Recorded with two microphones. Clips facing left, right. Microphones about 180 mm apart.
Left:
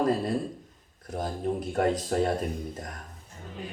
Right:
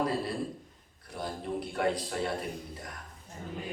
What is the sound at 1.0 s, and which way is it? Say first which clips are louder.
A man's voice: left 6 dB; 45° left (ahead or behind).